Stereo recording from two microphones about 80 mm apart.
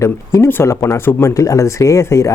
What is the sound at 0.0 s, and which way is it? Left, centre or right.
Speech, left.